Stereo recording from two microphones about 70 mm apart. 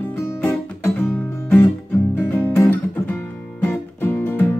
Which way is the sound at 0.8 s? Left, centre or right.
Left.